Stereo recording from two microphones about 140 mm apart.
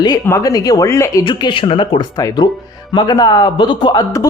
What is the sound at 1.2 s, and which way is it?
A man's voice, 35° left (ahead or behind).